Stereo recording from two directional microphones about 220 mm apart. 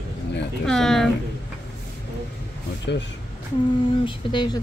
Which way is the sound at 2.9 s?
50° left (ahead or behind).